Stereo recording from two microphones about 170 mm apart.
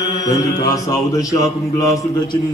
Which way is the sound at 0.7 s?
20° left (ahead or behind).